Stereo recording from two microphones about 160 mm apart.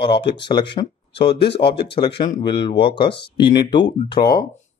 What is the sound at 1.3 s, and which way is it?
Speech, 90° left.